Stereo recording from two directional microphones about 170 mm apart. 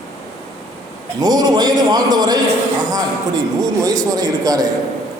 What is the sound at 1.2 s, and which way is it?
A man's voice, 25° right (ahead or behind).